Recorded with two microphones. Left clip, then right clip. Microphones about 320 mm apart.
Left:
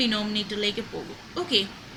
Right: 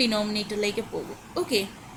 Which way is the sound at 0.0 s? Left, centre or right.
Centre.